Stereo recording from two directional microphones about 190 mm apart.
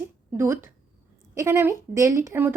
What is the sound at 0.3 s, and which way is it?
A woman's voice, 15° right (ahead or behind).